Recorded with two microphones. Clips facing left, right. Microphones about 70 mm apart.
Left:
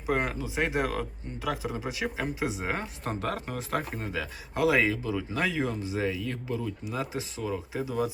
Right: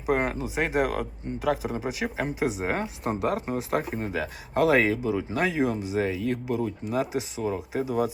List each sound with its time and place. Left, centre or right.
0.1 s speech: right
3.8 s speech: centre
4.1 s speech: right